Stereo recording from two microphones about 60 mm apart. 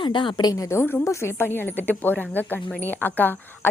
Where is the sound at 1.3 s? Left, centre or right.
Left.